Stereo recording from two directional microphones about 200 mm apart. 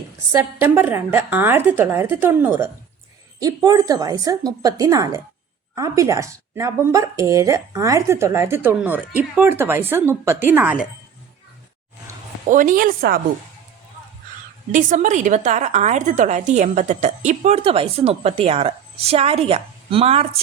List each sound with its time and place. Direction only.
0.3 s speech: 10° right (ahead or behind)
12.5 s a woman's voice: 40° right (ahead or behind)
14.7 s a woman's voice: 40° right (ahead or behind)